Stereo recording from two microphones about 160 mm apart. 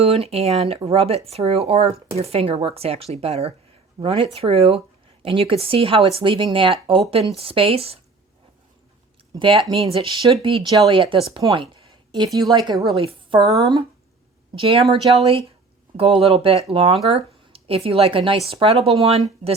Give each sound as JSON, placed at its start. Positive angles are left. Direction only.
{"t": 0.0, "sound": "speech", "side_deg": -40}
{"t": 9.3, "sound": "a woman's voice", "side_deg": -35}
{"t": 12.7, "sound": "a woman's voice", "side_deg": 0}
{"t": 13.0, "sound": "speech", "side_deg": -35}